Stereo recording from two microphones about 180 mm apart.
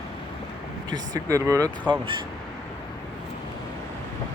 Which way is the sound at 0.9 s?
20° right (ahead or behind).